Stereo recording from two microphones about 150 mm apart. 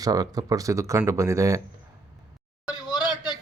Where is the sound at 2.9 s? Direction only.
30° left (ahead or behind).